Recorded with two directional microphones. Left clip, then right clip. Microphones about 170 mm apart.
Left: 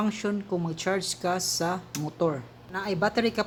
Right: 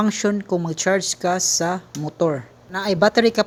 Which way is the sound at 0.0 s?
40° right (ahead or behind).